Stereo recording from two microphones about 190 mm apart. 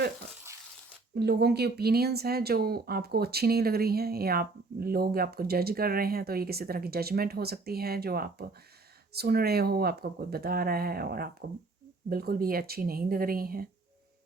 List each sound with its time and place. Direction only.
1.1 s speech: 55° right (ahead or behind)